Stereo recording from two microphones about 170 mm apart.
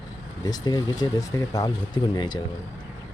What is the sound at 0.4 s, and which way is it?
Speech, 25° left (ahead or behind).